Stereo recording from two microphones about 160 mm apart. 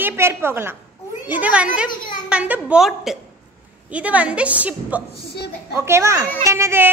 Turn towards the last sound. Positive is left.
turn(degrees=-15)  # may be behind; listen again after turning